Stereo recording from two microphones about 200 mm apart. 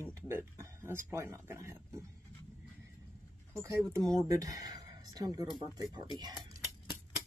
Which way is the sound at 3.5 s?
15° right (ahead or behind).